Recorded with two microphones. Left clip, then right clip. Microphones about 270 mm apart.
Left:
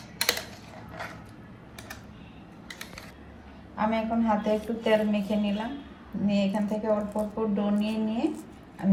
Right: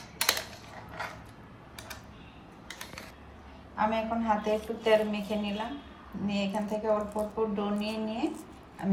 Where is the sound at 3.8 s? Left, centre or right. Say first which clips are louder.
Left 1 dB; right.